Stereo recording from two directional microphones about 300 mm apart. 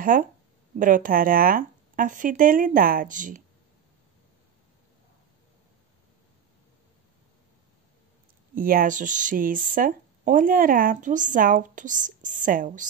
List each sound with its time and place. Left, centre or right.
0.0 s speech: right
8.5 s speech: right